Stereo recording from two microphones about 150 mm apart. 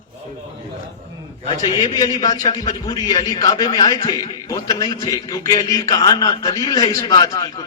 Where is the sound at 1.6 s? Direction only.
25° left (ahead or behind).